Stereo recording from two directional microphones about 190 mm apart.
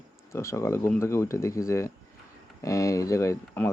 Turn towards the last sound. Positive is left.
turn(degrees=15)  # may be behind; listen again after turning